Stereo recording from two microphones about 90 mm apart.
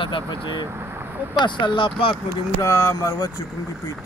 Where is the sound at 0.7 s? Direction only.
30° right (ahead or behind).